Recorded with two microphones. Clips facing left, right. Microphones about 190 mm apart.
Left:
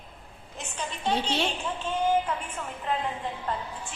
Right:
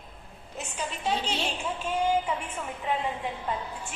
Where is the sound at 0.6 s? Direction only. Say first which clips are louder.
Right 1 dB; 5° right (ahead or behind).